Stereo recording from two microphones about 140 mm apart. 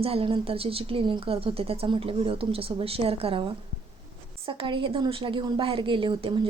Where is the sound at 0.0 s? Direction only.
40° right (ahead or behind).